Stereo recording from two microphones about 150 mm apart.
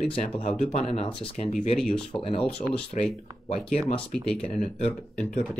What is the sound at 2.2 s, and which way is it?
Speech, 40° left (ahead or behind).